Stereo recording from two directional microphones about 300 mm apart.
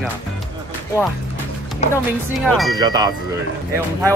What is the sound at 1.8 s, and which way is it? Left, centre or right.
Speech, left.